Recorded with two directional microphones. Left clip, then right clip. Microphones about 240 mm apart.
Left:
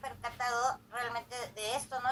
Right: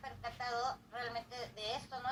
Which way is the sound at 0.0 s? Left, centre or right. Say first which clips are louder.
Left 6 dB; left.